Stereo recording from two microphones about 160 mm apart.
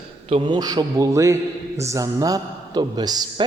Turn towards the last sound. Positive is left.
turn(degrees=-25)  # may be behind; listen again after turning